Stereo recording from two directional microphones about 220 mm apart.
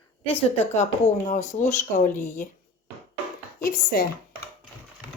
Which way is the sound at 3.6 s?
40° left (ahead or behind).